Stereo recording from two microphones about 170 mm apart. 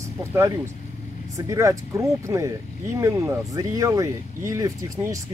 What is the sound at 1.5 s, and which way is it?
Speech, 20° right (ahead or behind).